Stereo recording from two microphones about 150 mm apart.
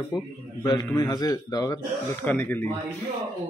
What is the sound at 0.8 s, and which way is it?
Speech, 25° left (ahead or behind).